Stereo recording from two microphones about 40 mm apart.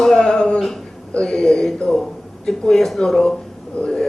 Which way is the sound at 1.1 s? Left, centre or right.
Centre.